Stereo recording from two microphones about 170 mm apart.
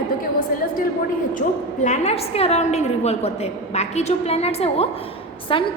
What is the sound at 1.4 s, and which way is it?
A woman's voice, 45° left (ahead or behind).